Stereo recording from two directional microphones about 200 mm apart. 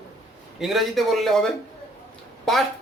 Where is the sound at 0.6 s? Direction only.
Centre (ahead or behind).